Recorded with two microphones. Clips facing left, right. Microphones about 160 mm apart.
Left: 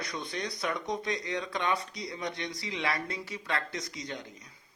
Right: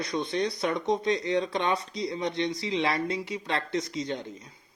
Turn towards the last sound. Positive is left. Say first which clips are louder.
# right 8 dB
turn(degrees=-25)  # may be behind; listen again after turning